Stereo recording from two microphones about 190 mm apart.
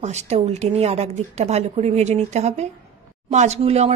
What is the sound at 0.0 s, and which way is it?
A woman's voice, 35° right (ahead or behind).